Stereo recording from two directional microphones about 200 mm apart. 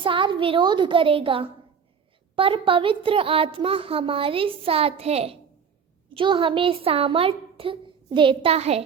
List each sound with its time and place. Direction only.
0.0 s a woman's voice: 25° right (ahead or behind)